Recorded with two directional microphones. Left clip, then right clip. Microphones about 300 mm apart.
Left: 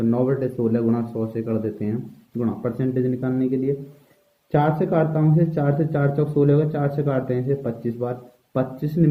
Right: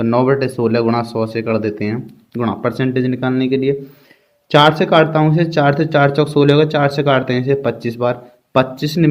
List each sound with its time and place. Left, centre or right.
0.0 s speech: right